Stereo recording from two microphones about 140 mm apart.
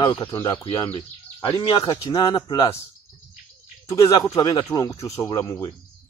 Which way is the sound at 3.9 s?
20° left (ahead or behind).